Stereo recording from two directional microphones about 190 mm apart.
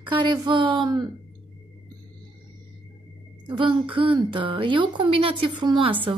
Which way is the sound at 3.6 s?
25° right (ahead or behind).